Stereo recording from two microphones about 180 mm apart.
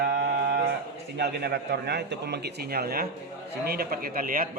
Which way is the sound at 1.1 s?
65° right (ahead or behind).